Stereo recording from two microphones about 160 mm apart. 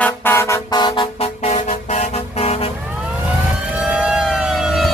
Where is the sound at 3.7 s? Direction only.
5° right (ahead or behind).